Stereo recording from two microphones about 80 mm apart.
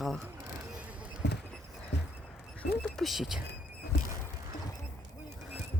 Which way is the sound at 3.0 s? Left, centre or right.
Centre.